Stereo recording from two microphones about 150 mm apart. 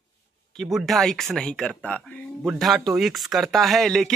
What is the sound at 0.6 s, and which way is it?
Speech, centre (ahead or behind).